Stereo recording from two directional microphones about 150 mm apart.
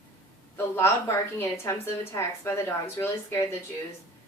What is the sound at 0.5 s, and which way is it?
A woman's voice, 15° left (ahead or behind).